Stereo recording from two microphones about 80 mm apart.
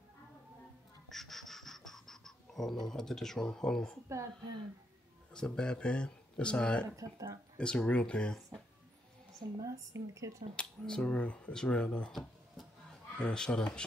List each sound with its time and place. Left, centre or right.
1.0 s a sound: centre
5.3 s speech: centre
7.0 s a woman's voice: right
7.5 s speech: centre
9.4 s a woman's voice: right
10.5 s speech: centre
12.1 s speech: centre